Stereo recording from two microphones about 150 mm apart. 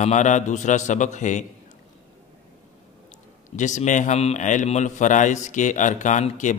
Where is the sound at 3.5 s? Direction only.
55° left (ahead or behind).